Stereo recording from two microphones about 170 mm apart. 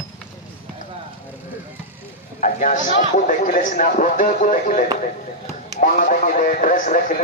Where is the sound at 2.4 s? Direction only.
50° left (ahead or behind).